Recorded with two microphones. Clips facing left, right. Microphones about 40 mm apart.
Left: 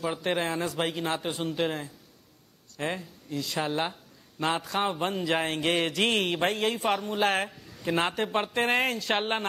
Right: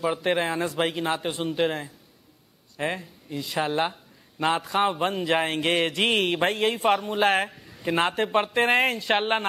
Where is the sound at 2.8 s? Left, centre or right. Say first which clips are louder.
Right 3 dB; centre.